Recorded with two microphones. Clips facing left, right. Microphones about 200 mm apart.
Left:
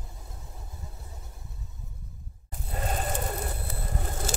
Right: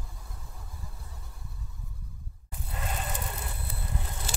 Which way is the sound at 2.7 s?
40° left (ahead or behind).